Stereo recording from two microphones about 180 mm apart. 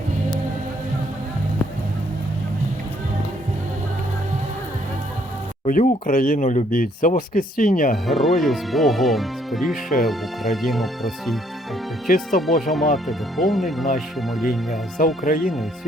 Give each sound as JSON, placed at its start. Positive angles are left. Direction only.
{"t": 5.6, "sound": "speech", "side_deg": 50}
{"t": 8.0, "sound": "speech", "side_deg": 0}
{"t": 12.0, "sound": "speech", "side_deg": 50}
{"t": 12.6, "sound": "speech", "side_deg": 0}
{"t": 14.9, "sound": "speech", "side_deg": 50}
{"t": 15.4, "sound": "speech", "side_deg": 0}